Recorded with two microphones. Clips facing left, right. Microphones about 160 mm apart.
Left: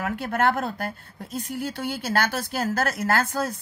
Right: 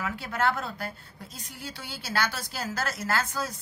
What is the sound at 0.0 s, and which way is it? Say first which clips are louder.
Speech: left 5 dB; 55° left (ahead or behind).